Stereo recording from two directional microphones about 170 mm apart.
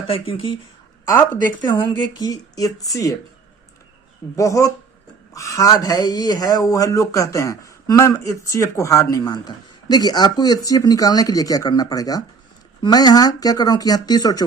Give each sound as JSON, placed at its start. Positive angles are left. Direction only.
{"t": 0.1, "sound": "speech", "side_deg": 30}
{"t": 1.0, "sound": "speech", "side_deg": 10}
{"t": 1.5, "sound": "speech", "side_deg": 25}
{"t": 4.4, "sound": "speech", "side_deg": 20}